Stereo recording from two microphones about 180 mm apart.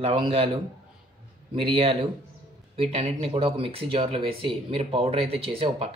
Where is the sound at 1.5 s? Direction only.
30° right (ahead or behind).